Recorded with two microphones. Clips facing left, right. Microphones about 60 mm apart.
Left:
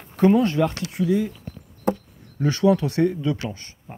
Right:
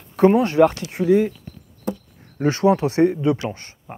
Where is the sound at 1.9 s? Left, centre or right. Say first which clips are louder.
Left 4 dB; left.